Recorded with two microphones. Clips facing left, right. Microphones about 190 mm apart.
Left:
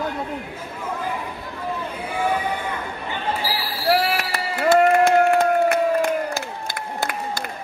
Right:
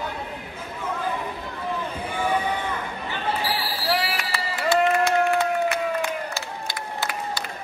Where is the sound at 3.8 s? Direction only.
55° left (ahead or behind).